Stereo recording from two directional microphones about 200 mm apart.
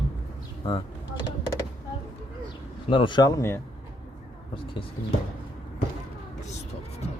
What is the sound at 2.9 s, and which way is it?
Speech, 25° left (ahead or behind).